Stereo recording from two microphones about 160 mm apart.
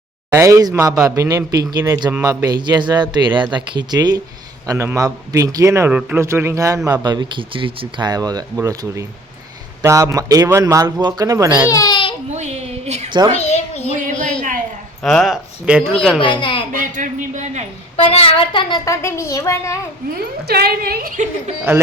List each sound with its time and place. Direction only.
0.3 s a man's voice: 20° right (ahead or behind)
11.7 s speech: 25° left (ahead or behind)
12.3 s a sound: 45° right (ahead or behind)
13.1 s a man's voice: 25° right (ahead or behind)
13.4 s a sound: 40° left (ahead or behind)
13.9 s a sound: 50° right (ahead or behind)
15.0 s speech: centre (ahead or behind)
16.2 s a child's voice: 30° left (ahead or behind)
16.7 s a sound: 55° right (ahead or behind)
17.9 s a woman's voice: 40° left (ahead or behind)
19.0 s a child's voice: 15° left (ahead or behind)
20.1 s a woman's voice: 75° right (ahead or behind); by 21.5 s 50° right (ahead or behind)